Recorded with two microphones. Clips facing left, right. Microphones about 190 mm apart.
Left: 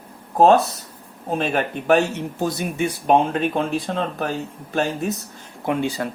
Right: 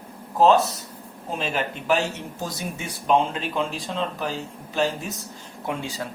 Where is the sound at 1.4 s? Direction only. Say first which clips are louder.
Left 4 dB; 55° left (ahead or behind).